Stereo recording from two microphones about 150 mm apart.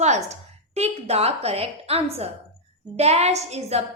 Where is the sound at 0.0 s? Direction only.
50° right (ahead or behind).